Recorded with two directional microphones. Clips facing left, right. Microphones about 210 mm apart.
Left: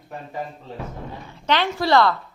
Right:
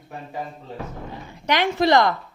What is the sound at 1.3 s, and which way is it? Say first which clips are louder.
Speech: even; 15° right (ahead or behind).